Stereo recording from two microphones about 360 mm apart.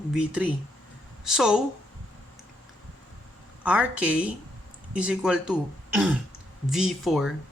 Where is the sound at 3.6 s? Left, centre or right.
Centre.